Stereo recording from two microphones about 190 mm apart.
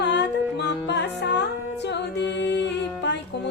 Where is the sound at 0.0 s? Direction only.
65° left (ahead or behind).